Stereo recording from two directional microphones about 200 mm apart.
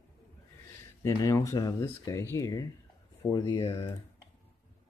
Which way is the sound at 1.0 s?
15° left (ahead or behind).